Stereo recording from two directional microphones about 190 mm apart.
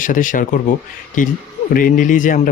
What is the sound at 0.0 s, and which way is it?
Speech, 45° left (ahead or behind).